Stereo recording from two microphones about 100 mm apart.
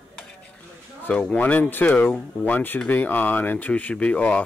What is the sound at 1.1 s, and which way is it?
Speech, 15° left (ahead or behind).